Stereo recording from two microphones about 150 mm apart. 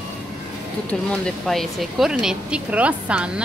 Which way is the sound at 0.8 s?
5° left (ahead or behind).